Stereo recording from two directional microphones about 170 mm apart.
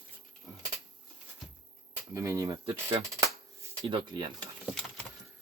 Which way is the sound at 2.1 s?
15° right (ahead or behind).